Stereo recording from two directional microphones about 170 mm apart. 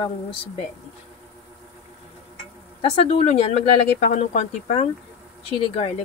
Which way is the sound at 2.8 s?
35° left (ahead or behind).